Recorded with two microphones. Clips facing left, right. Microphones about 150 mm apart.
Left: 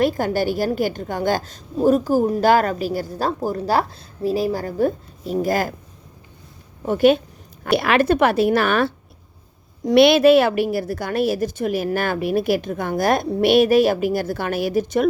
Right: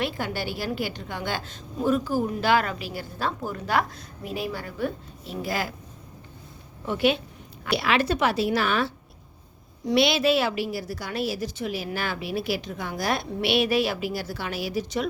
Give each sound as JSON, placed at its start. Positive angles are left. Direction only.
{"t": 0.0, "sound": "a woman's voice", "side_deg": 45}
{"t": 6.8, "sound": "a woman's voice", "side_deg": 45}